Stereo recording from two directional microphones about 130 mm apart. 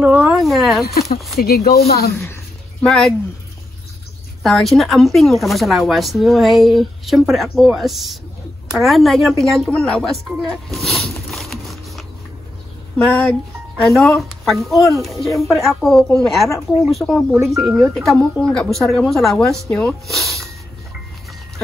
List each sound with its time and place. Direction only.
0.0 s a sound: 5° right (ahead or behind)
1.2 s speech: centre (ahead or behind)
2.1 s a woman's voice: 20° left (ahead or behind)
2.8 s speech: 5° left (ahead or behind)
4.4 s a woman's voice: centre (ahead or behind)